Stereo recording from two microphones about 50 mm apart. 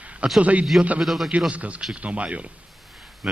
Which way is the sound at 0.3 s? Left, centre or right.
Right.